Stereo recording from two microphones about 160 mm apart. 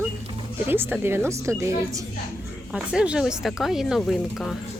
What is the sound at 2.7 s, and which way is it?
Speech, 5° right (ahead or behind).